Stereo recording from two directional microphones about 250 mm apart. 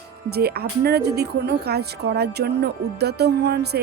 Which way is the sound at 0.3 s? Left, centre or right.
Right.